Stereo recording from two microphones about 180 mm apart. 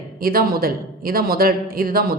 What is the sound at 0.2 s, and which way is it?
A woman's voice, 55° right (ahead or behind).